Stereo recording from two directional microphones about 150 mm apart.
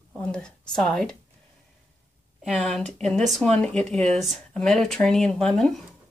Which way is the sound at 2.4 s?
Centre (ahead or behind).